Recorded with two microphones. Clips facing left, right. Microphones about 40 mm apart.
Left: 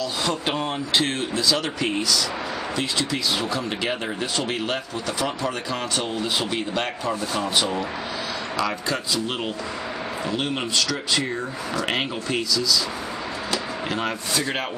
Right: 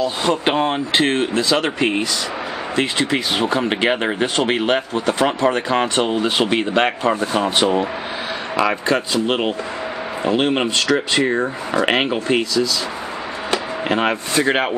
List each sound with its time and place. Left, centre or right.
0.0 s speech: right